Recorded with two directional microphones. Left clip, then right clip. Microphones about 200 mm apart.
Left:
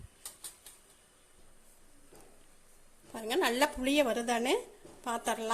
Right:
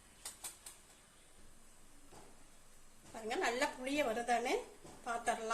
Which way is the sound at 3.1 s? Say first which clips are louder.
Left 6 dB; 40° left (ahead or behind).